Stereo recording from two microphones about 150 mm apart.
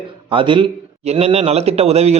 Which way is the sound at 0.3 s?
35° right (ahead or behind).